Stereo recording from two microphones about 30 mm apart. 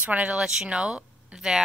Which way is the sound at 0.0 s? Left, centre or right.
Right.